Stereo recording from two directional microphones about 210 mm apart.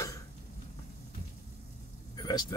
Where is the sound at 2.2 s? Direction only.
20° left (ahead or behind).